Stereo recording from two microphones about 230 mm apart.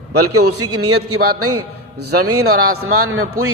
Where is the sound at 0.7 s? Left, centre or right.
Right.